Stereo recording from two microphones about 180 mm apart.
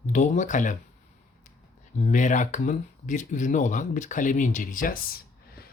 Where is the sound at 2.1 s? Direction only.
45° left (ahead or behind).